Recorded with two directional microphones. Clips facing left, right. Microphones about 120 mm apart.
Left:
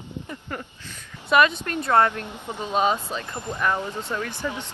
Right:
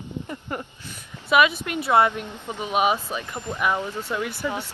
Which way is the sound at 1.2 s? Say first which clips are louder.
Even; 5° right (ahead or behind).